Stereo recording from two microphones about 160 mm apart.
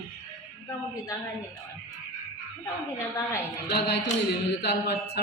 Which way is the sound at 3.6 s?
90° left.